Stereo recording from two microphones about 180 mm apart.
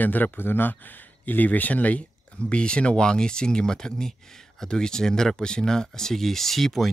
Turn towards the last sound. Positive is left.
turn(degrees=0)  # may be behind; listen again after turning